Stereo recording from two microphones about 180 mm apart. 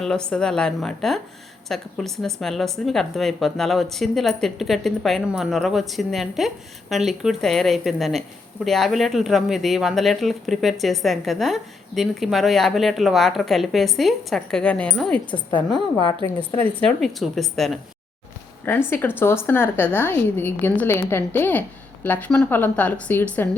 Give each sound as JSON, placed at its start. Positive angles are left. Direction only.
{"t": 0.0, "sound": "speech", "side_deg": 5}
{"t": 15.3, "sound": "a woman's voice", "side_deg": 25}
{"t": 16.6, "sound": "speech", "side_deg": 0}
{"t": 18.6, "sound": "speech", "side_deg": 10}